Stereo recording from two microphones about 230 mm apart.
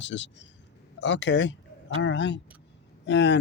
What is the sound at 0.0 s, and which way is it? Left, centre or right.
Speech, left.